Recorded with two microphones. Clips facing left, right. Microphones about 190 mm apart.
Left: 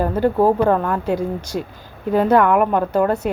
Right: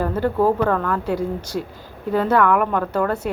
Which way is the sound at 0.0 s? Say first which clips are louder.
Left 3 dB; 15° left (ahead or behind).